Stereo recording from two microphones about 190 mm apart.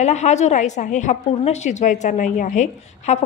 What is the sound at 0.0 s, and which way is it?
A woman's voice, 35° left (ahead or behind).